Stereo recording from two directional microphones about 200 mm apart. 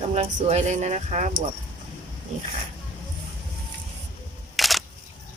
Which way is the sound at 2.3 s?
35° right (ahead or behind).